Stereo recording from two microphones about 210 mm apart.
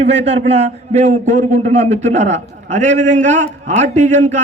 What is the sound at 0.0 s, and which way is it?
A man's voice, 30° right (ahead or behind).